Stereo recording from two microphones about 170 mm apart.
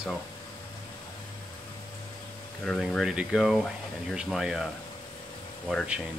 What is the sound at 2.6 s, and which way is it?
Speech, 5° left (ahead or behind).